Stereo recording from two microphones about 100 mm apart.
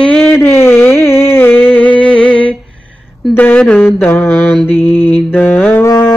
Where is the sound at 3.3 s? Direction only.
20° left (ahead or behind).